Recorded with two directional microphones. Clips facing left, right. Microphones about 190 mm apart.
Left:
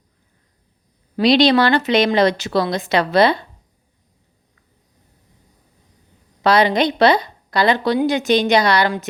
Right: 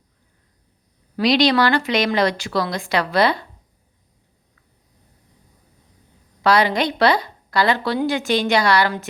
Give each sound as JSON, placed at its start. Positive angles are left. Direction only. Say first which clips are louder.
{"t": 1.1, "sound": "a woman's voice", "louder": "left 3 dB", "side_deg": 25}
{"t": 6.4, "sound": "a woman's voice", "louder": "left 2 dB", "side_deg": 20}